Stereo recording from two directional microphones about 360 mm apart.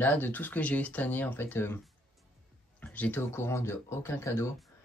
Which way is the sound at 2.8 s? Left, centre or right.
Centre.